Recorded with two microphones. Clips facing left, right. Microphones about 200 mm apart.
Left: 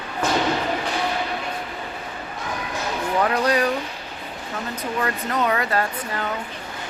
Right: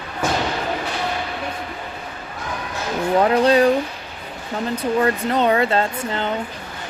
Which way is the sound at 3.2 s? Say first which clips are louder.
Right 6 dB; 25° right (ahead or behind).